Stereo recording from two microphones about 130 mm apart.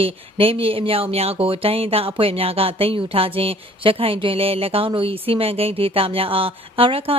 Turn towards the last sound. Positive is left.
turn(degrees=-45)  # may be behind; listen again after turning